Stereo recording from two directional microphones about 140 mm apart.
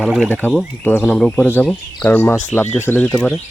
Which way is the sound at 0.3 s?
10° left (ahead or behind).